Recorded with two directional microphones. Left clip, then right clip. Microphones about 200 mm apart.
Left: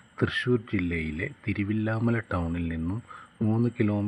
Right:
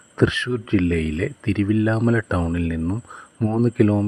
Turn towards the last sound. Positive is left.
turn(degrees=-40)  # may be behind; listen again after turning